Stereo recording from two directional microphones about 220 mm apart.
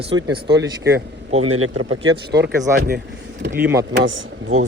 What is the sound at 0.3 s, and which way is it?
Speech, 50° right (ahead or behind).